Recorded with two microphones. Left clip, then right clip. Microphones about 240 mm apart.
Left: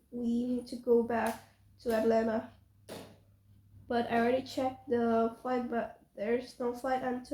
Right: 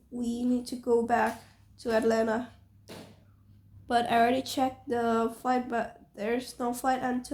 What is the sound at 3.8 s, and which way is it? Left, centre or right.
Speech, right.